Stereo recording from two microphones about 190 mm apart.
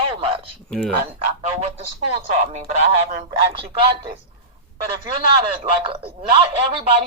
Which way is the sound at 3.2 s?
20° right (ahead or behind).